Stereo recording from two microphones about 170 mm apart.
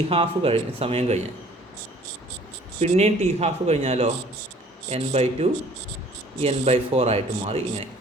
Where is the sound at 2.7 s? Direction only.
40° right (ahead or behind).